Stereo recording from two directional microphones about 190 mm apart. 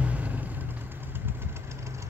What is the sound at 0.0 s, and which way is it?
Vehicle, 10° right (ahead or behind).